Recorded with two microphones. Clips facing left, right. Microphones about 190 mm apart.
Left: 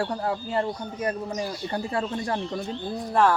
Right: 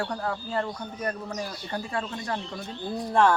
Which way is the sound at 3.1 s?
5° left (ahead or behind).